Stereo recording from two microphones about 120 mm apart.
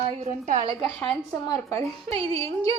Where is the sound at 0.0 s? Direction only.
70° right (ahead or behind).